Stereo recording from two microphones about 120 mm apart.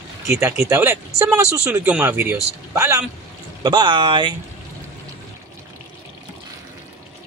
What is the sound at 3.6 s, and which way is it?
Speech, 40° right (ahead or behind).